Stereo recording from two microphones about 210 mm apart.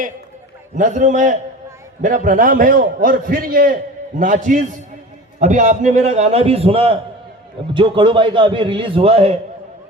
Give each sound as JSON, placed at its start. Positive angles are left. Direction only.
{"t": 0.8, "sound": "a man's voice", "side_deg": -35}